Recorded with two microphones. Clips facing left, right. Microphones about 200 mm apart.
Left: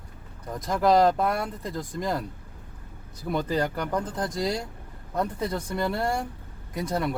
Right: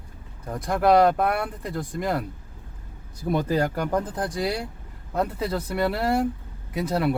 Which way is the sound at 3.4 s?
10° right (ahead or behind).